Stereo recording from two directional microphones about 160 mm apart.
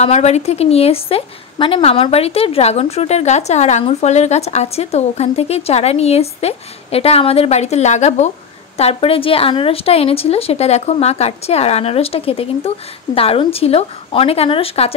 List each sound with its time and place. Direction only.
0.0 s a woman's voice: 45° left (ahead or behind)